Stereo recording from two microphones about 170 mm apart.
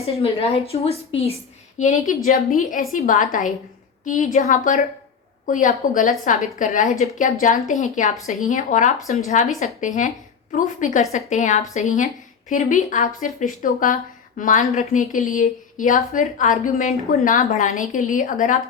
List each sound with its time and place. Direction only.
0.0 s a woman's voice: 35° left (ahead or behind)
1.8 s a woman's voice: 50° left (ahead or behind)